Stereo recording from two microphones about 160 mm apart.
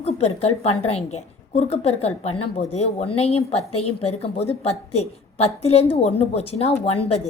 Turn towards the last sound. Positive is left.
turn(degrees=40)  # may be behind; listen again after turning